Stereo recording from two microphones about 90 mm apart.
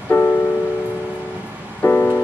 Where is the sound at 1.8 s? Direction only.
20° left (ahead or behind).